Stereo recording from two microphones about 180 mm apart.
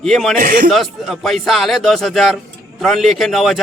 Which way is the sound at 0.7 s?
Centre (ahead or behind).